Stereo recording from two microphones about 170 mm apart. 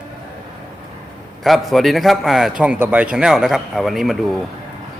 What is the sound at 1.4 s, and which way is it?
A man's voice, centre (ahead or behind).